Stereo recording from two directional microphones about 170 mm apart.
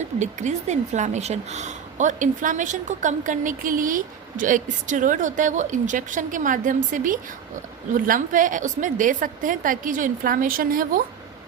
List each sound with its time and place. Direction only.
0.2 s speech: 45° right (ahead or behind)